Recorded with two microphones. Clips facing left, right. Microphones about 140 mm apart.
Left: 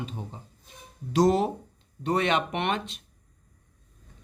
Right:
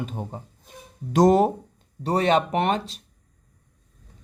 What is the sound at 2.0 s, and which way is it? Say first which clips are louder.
Speech: right 4 dB; 35° right (ahead or behind).